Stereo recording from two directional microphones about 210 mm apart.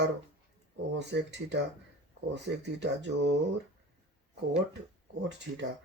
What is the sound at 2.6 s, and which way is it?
Speech, 55° right (ahead or behind).